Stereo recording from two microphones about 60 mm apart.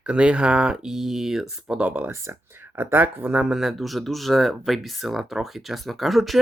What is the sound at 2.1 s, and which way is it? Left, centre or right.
Speech, right.